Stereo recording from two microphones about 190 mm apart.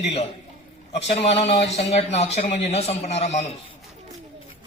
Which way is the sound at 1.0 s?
35° left (ahead or behind).